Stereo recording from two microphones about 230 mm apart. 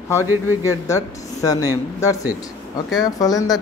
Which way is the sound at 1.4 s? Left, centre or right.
Centre.